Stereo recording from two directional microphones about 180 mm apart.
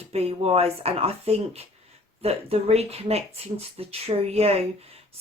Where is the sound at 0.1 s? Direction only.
35° right (ahead or behind).